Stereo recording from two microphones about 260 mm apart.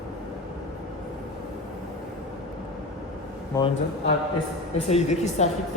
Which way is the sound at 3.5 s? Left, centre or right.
Centre.